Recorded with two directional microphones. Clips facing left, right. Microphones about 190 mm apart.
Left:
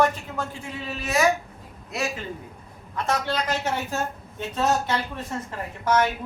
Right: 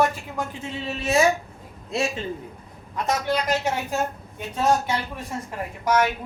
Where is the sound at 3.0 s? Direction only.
15° right (ahead or behind).